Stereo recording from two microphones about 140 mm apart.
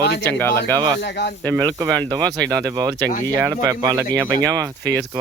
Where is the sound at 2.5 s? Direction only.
25° right (ahead or behind).